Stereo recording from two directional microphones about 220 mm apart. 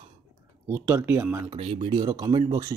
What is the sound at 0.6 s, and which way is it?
Speech, 10° right (ahead or behind).